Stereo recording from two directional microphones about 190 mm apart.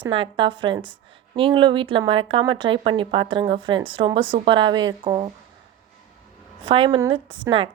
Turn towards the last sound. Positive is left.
turn(degrees=-25)  # may be behind; listen again after turning